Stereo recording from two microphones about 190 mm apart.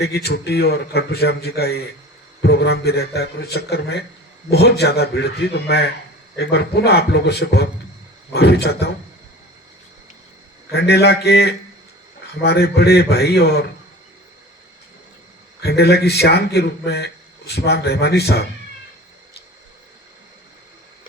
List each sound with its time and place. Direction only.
0.0 s speech: 55° left (ahead or behind)
10.7 s speech: 60° left (ahead or behind)
15.6 s speech: 60° left (ahead or behind)